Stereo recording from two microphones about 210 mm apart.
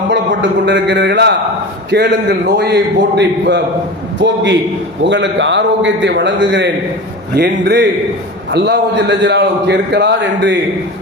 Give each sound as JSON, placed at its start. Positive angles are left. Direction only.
{"t": 0.1, "sound": "a man's voice", "side_deg": -55}
{"t": 5.0, "sound": "a man's voice", "side_deg": -60}